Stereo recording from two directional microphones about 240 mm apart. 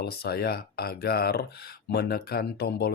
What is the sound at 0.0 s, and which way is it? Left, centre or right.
Speech, left.